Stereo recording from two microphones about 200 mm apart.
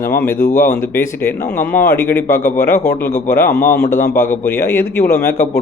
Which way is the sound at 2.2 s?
40° left (ahead or behind).